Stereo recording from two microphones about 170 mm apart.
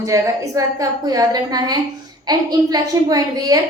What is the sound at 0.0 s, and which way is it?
A woman's voice, 20° right (ahead or behind).